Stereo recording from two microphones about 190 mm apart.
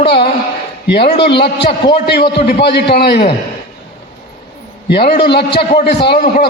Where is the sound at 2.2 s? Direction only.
30° left (ahead or behind).